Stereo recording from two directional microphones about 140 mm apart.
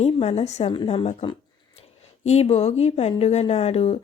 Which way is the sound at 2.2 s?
50° left (ahead or behind).